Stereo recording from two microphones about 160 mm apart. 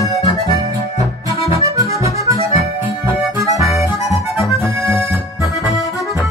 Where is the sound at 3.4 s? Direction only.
20° right (ahead or behind).